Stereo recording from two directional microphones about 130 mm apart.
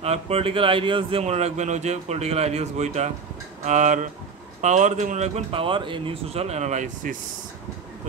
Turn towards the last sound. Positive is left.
turn(degrees=-80)